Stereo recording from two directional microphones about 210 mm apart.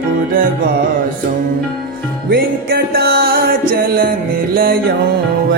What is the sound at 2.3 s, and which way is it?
Music, 50° right (ahead or behind).